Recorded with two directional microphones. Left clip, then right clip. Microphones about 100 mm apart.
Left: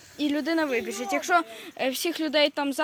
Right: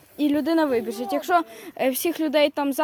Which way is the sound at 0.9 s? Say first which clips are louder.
Right 2 dB; 80° right.